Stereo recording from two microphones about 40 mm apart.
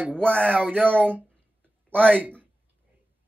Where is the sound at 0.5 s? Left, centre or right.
Right.